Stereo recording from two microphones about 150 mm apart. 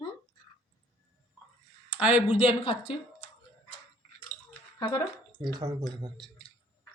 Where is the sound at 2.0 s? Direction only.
10° right (ahead or behind).